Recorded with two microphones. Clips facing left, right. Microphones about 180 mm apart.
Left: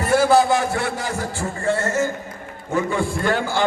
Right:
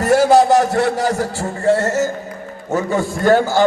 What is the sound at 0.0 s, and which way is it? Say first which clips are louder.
A man's voice: right 4 dB; 40° right (ahead or behind).